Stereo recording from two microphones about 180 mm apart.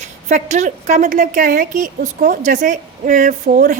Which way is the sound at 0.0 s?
40° right (ahead or behind).